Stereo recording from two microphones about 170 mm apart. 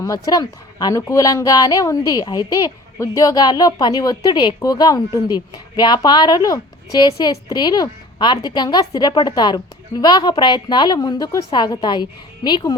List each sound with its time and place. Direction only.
0.0 s a woman's voice: 20° left (ahead or behind)